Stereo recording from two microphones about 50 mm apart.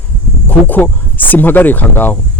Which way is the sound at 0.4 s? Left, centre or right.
Left.